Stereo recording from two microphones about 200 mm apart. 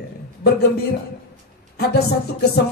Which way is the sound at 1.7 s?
55° left (ahead or behind).